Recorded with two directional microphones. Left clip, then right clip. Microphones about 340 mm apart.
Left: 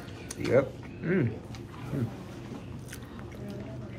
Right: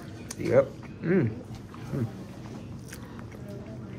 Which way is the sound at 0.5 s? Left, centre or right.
Centre.